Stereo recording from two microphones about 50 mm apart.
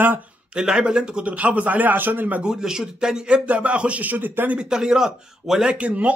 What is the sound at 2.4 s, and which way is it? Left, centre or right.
Speech, centre.